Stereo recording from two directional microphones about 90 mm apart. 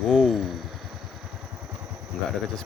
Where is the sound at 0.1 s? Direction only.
5° left (ahead or behind).